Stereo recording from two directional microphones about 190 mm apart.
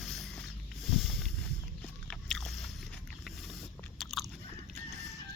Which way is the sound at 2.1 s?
5° left (ahead or behind).